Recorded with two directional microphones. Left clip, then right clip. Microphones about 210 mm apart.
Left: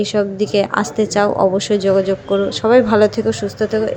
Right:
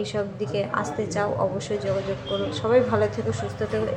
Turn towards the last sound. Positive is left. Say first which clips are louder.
# left 9 dB
turn(degrees=35)  # may be behind; listen again after turning